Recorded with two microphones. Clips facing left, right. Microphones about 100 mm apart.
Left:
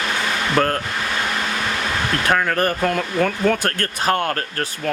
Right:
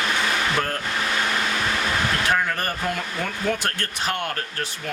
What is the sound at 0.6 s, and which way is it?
Speech, 70° left (ahead or behind).